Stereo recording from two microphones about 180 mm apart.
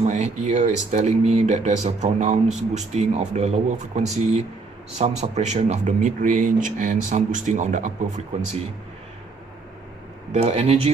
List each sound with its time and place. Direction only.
0.0 s speech: 40° right (ahead or behind)
10.3 s speech: 35° right (ahead or behind)